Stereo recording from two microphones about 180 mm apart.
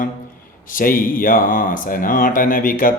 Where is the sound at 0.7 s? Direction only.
50° left (ahead or behind).